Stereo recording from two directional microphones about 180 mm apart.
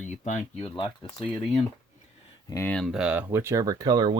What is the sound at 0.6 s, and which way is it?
Speech, 30° left (ahead or behind).